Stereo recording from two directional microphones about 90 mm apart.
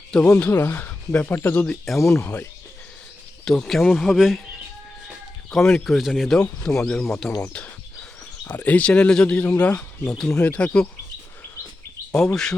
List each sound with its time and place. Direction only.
0.1 s speech: 10° left (ahead or behind)
0.5 s speech: 25° left (ahead or behind)
2.0 s speech: 30° left (ahead or behind)
3.4 s speech: 5° left (ahead or behind)
5.5 s speech: 5° left (ahead or behind)
12.1 s speech: 5° left (ahead or behind)